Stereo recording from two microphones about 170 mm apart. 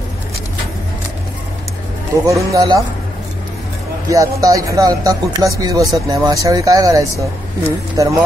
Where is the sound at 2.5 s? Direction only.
20° right (ahead or behind).